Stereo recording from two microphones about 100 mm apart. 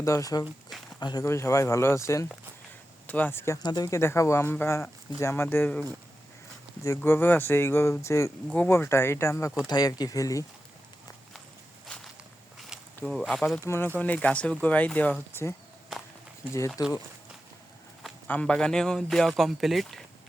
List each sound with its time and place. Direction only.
0.0 s speech: 35° left (ahead or behind)
1.2 s speech: 30° left (ahead or behind)
3.1 s speech: 15° left (ahead or behind)
3.6 s speech: 40° left (ahead or behind)
3.9 s speech: 30° left (ahead or behind)
6.8 s speech: 25° left (ahead or behind)
9.6 s speech: 40° left (ahead or behind)
11.9 s walk: 10° left (ahead or behind)
12.7 s a sound: 5° right (ahead or behind)
13.1 s speech: centre (ahead or behind)
13.7 s speech: 20° left (ahead or behind)
15.3 s speech: 25° left (ahead or behind)
18.3 s speech: 10° left (ahead or behind)